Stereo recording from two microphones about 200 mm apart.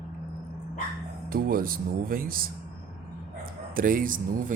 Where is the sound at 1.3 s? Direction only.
45° right (ahead or behind).